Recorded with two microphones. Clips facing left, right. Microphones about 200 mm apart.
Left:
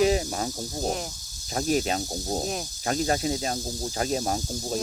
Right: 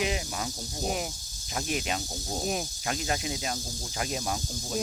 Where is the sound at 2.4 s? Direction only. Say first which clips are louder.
Even; centre (ahead or behind).